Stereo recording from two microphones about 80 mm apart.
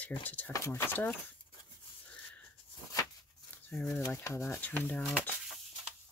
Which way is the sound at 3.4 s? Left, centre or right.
Left.